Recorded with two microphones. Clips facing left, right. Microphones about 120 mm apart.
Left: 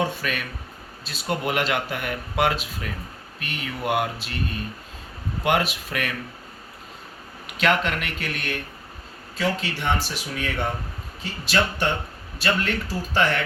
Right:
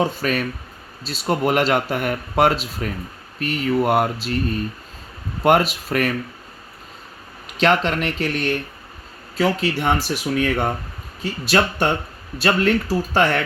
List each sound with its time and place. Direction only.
0.2 s speech: 35° right (ahead or behind)
5.4 s speech: 40° right (ahead or behind)
7.6 s speech: 35° right (ahead or behind)
9.4 s speech: 50° right (ahead or behind)